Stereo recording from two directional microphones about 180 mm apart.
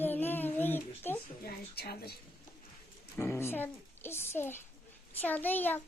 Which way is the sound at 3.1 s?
15° left (ahead or behind).